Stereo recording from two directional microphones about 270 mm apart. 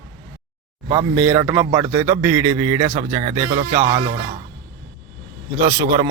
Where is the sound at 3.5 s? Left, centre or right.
Right.